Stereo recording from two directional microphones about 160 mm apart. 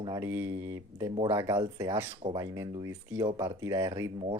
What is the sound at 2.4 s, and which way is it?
Speech, 20° right (ahead or behind).